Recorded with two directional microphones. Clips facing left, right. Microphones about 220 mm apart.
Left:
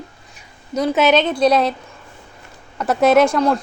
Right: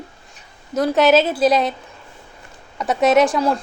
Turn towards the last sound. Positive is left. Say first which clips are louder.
# left 2 dB
turn(degrees=-5)  # may be behind; listen again after turning